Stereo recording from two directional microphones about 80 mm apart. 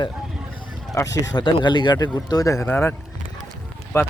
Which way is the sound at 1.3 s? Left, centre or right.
Left.